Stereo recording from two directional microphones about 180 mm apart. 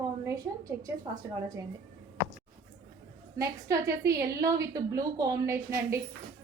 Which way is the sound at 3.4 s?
15° right (ahead or behind).